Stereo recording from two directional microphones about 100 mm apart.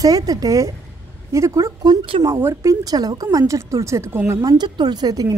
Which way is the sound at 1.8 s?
45° right (ahead or behind).